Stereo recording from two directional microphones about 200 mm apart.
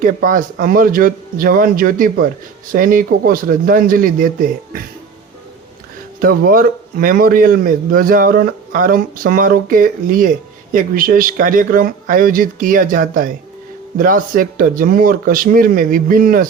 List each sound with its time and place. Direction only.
0.0 s a man's voice: 45° right (ahead or behind)
6.1 s a man's voice: 45° right (ahead or behind)